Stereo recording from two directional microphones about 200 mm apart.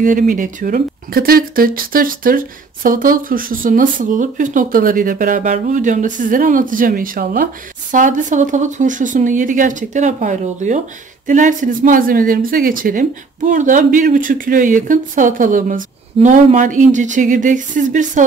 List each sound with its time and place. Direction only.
0.0 s speech: 45° right (ahead or behind)